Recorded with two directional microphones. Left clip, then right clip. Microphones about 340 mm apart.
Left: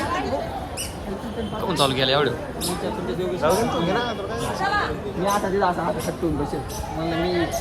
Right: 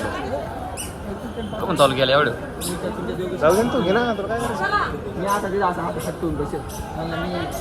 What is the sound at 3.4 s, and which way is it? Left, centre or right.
Speech, right.